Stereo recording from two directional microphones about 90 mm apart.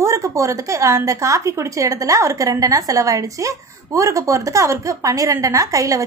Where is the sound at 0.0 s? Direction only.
35° right (ahead or behind).